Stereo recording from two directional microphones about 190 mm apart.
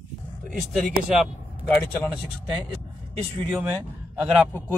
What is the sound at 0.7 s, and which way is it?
Speech, centre (ahead or behind).